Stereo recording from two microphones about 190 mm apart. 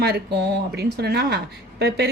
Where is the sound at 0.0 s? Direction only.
60° right (ahead or behind).